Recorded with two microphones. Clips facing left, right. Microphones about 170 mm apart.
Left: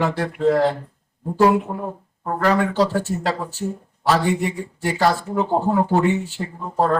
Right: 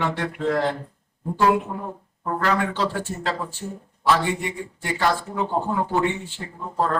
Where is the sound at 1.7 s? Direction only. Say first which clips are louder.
Left 4 dB; 30° left (ahead or behind).